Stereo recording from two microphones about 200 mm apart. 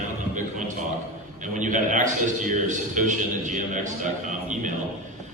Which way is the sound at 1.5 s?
40° right (ahead or behind).